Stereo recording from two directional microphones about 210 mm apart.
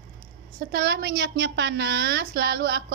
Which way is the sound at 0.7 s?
50° right (ahead or behind).